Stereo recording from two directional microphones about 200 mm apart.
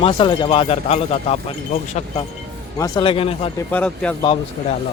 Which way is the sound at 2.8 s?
25° left (ahead or behind).